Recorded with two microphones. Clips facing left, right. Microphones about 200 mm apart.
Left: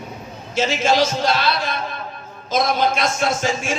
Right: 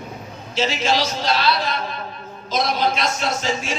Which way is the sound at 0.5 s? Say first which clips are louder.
Left 3 dB; 50° left (ahead or behind).